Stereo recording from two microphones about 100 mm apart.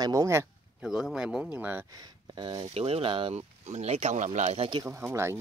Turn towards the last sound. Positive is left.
turn(degrees=-25)  # may be behind; listen again after turning